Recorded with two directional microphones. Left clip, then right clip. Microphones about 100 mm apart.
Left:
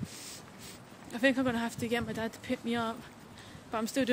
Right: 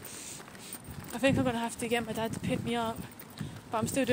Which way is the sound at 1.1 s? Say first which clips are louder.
Even; 35° left (ahead or behind).